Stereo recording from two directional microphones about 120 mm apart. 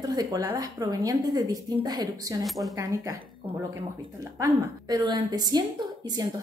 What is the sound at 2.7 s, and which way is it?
Speech, 30° right (ahead or behind).